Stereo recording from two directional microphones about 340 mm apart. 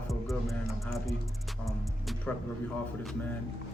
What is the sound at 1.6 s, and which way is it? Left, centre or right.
Music, centre.